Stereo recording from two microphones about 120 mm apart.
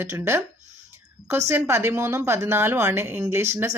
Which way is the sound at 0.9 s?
20° right (ahead or behind).